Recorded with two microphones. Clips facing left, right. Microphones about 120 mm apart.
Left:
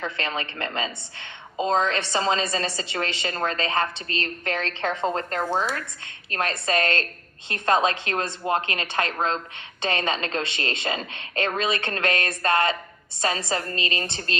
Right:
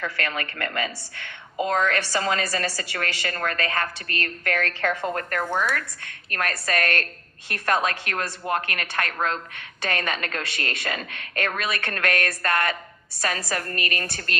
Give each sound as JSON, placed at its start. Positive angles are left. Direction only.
{"t": 0.0, "sound": "a woman's voice", "side_deg": 25}